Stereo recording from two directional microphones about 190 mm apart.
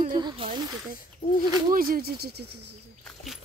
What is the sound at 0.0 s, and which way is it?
Snake, 25° right (ahead or behind).